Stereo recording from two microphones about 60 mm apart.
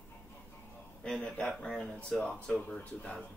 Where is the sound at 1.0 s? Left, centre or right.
Centre.